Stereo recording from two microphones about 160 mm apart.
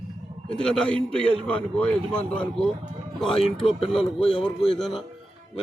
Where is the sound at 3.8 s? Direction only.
35° left (ahead or behind).